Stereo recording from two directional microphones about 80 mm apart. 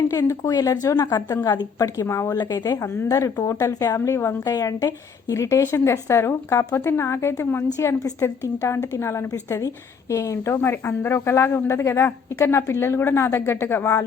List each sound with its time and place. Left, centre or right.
0.5 s a woman's voice: left
2.3 s speech: left
2.7 s a woman's voice: left
4.5 s a woman's voice: left